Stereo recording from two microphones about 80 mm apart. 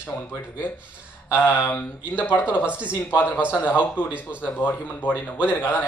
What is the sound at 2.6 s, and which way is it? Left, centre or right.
Speech, centre.